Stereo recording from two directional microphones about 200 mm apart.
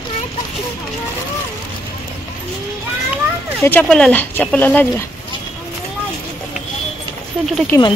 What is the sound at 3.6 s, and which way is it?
Speech, 10° left (ahead or behind).